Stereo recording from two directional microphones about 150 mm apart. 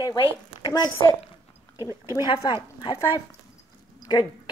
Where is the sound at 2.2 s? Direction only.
30° left (ahead or behind).